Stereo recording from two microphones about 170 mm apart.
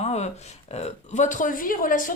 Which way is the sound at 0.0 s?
40° left (ahead or behind).